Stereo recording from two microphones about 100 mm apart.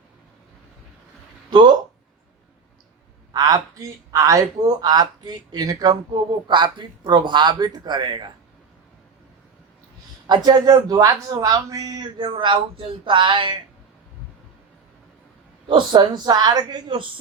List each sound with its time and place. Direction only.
1.5 s speech: 45° right (ahead or behind)
3.3 s speech: 35° right (ahead or behind)
6.5 s a man's voice: 55° right (ahead or behind)
10.2 s a man's voice: 45° right (ahead or behind)
15.6 s a man's voice: 55° right (ahead or behind)